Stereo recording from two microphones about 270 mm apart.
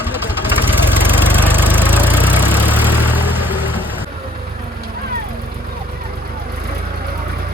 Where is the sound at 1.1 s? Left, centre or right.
Centre.